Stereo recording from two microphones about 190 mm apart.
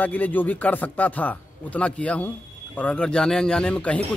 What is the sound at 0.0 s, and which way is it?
A man's voice, 10° left (ahead or behind).